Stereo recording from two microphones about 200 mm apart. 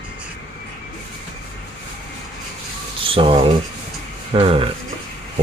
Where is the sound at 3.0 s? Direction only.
25° right (ahead or behind).